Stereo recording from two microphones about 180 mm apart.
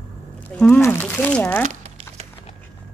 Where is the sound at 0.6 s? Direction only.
5° left (ahead or behind).